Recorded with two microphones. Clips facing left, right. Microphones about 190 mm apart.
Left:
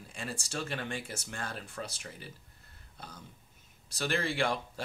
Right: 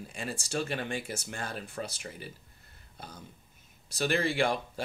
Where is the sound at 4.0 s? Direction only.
15° right (ahead or behind).